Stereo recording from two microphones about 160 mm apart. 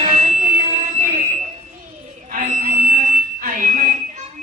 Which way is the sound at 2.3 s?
55° right (ahead or behind).